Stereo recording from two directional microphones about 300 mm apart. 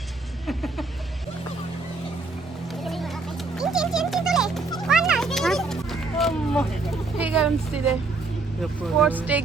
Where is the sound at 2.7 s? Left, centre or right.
Centre.